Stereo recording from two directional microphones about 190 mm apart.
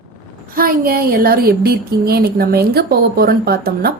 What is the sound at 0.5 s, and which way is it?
Speech, 50° right (ahead or behind).